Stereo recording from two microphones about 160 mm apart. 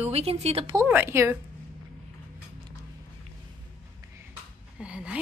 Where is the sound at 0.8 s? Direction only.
15° right (ahead or behind).